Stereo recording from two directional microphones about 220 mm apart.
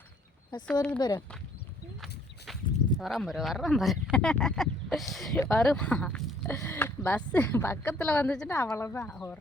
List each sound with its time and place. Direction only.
0.7 s speech: 5° left (ahead or behind)
0.9 s speech: 20° left (ahead or behind)
2.5 s a sound: centre (ahead or behind)
3.0 s speech: centre (ahead or behind)